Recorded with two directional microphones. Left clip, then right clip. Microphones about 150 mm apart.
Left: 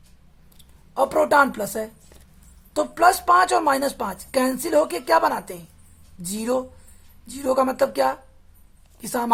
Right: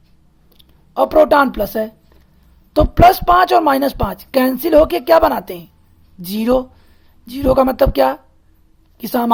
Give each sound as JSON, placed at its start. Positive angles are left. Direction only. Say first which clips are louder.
{"t": 0.5, "sound": "speech", "louder": "right 7 dB", "side_deg": -50}